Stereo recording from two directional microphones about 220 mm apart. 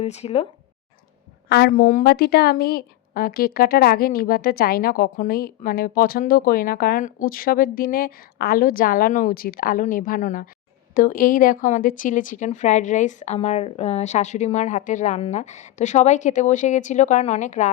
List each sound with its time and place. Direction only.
0.0 s speech: 30° left (ahead or behind)
1.5 s a woman's voice: 50° left (ahead or behind)